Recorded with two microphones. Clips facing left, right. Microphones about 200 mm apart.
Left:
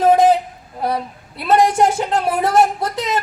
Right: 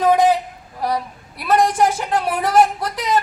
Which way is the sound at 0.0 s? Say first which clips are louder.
Left 2 dB; 30° left (ahead or behind).